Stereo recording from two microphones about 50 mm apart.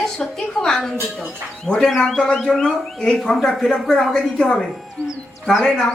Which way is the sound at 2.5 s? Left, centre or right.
Centre.